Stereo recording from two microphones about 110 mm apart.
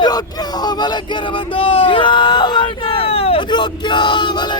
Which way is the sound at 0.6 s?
40° left (ahead or behind).